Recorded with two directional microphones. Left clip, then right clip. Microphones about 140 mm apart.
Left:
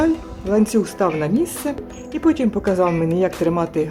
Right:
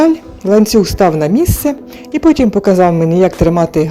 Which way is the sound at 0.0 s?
30° right (ahead or behind).